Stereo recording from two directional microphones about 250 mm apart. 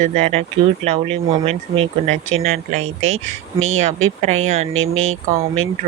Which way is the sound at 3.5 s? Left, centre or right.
Right.